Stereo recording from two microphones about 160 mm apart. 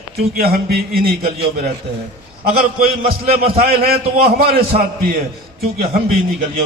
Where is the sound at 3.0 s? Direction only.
70° right (ahead or behind).